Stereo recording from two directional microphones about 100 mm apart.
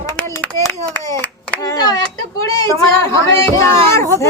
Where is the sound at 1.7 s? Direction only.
40° left (ahead or behind).